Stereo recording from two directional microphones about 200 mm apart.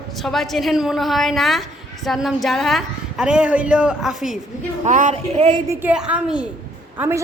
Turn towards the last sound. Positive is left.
turn(degrees=-10)  # may be behind; listen again after turning